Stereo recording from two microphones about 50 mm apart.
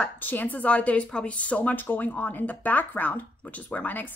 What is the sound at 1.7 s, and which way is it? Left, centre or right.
Speech, left.